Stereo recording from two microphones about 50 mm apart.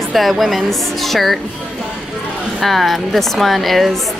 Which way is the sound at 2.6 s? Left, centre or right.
Centre.